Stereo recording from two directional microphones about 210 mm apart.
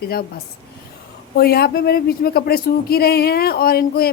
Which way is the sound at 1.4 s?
50° left (ahead or behind).